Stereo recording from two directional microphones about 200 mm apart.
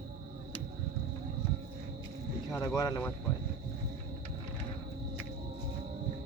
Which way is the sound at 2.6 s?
20° left (ahead or behind).